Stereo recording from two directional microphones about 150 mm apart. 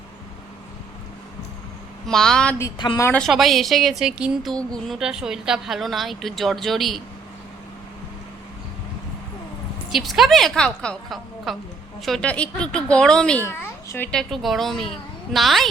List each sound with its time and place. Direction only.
2.0 s a woman's voice: 5° left (ahead or behind)
2.6 s speech: 25° left (ahead or behind)
3.0 s speech: 10° left (ahead or behind)
3.2 s a woman's voice: centre (ahead or behind)
9.9 s a woman's voice: centre (ahead or behind)
13.4 s a woman's voice: 15° left (ahead or behind)
14.1 s a woman's voice: 5° left (ahead or behind)